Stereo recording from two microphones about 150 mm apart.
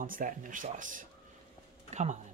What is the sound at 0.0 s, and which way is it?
Speech, 65° right (ahead or behind).